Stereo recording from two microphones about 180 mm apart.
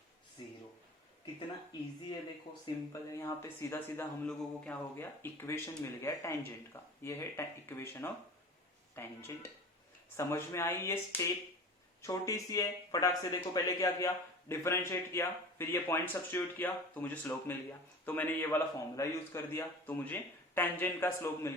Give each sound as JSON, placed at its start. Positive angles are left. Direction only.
{"t": 2.9, "sound": "speech", "side_deg": 15}